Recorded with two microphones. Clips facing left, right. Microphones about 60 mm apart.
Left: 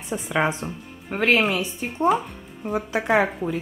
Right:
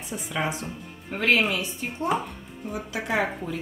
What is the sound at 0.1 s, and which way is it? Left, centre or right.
Speech, left.